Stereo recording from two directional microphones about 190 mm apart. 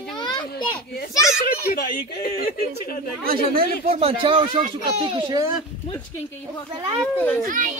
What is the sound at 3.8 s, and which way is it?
A child's voice, 30° right (ahead or behind).